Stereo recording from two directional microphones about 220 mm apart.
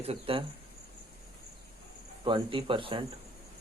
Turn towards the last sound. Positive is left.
turn(degrees=-20)  # may be behind; listen again after turning